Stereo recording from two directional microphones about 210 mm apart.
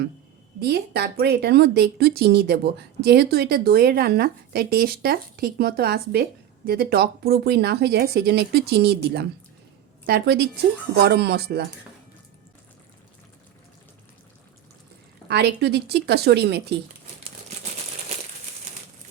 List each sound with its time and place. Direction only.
0.6 s speech: 50° right (ahead or behind)
15.3 s speech: 50° right (ahead or behind)